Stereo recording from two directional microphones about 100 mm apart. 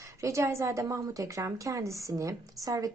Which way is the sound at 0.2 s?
30° right (ahead or behind).